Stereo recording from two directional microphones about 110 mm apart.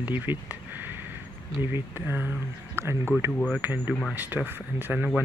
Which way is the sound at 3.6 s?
15° right (ahead or behind).